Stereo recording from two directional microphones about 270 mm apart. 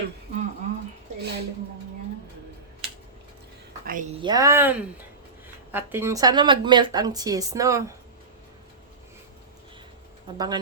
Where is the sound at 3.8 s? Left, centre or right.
Right.